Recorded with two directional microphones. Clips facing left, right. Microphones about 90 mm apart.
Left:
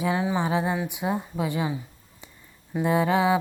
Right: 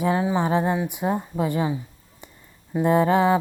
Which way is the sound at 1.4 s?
40° right (ahead or behind).